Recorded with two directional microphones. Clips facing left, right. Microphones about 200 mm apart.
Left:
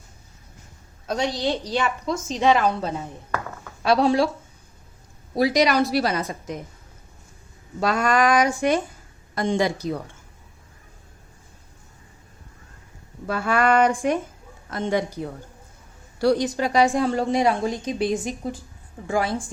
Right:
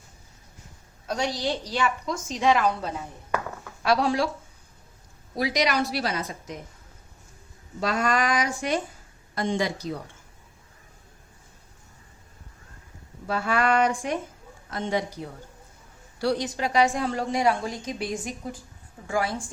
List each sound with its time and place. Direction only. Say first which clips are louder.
1.0 s a woman's voice: left 3 dB; 20° left (ahead or behind)
5.3 s a woman's voice: left 6 dB; 35° left (ahead or behind)
7.8 s a woman's voice: left 4 dB; 55° left (ahead or behind)
13.2 s speech: left 3 dB; 50° left (ahead or behind)
16.2 s a woman's voice: left 5 dB; 45° left (ahead or behind); by 19.3 s 25° left (ahead or behind)